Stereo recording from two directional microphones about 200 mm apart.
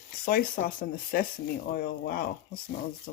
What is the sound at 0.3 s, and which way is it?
Speech, 45° left (ahead or behind).